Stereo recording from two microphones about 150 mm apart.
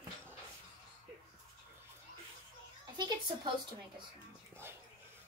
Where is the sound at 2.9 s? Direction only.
30° right (ahead or behind).